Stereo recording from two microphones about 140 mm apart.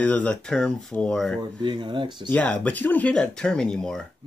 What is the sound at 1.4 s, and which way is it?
Speech, 35° right (ahead or behind).